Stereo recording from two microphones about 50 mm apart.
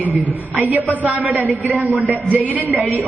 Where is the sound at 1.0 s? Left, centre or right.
Right.